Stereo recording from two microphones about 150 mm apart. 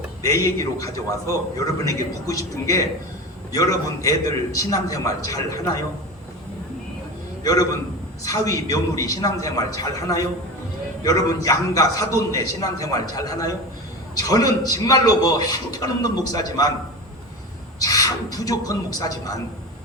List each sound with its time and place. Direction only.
0.2 s a man's voice: 20° left (ahead or behind)
3.5 s a man's voice: 25° left (ahead or behind)
7.4 s a man's voice: 25° left (ahead or behind)
17.7 s a man's voice: 25° left (ahead or behind)